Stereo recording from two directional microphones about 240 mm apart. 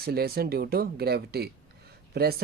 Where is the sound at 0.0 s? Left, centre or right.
Right.